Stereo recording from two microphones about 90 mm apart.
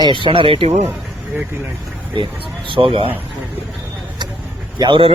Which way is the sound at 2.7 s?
85° right.